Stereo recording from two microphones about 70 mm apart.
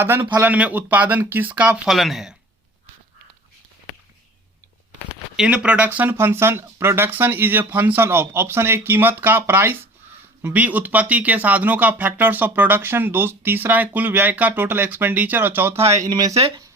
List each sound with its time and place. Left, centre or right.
0.0 s speech: right
0.3 s speech: right
2.0 s speech: centre
5.4 s speech: centre
6.1 s speech: right
16.0 s speech: right